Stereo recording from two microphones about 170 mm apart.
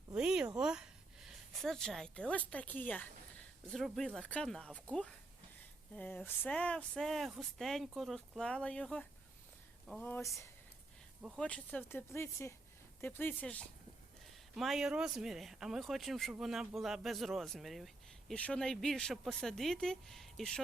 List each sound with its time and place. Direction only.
0.1 s speech: 5° right (ahead or behind)
10.1 s speech: 15° left (ahead or behind)
11.2 s speech: centre (ahead or behind)
14.5 s speech: centre (ahead or behind)